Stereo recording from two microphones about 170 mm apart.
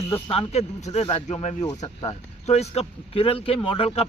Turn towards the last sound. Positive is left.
turn(degrees=35)  # may be behind; listen again after turning